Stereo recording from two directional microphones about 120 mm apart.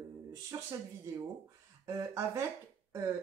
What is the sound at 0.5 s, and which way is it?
Speech, 25° right (ahead or behind).